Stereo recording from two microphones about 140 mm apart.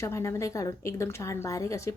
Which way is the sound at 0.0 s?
20° left (ahead or behind).